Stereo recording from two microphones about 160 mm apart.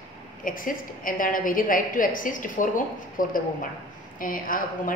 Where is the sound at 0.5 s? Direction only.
60° left (ahead or behind).